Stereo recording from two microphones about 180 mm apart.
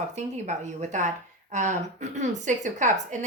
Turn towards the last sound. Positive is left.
turn(degrees=-45)  # may be behind; listen again after turning